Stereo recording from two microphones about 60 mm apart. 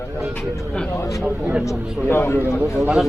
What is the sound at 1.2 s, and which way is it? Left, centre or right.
Speech, right.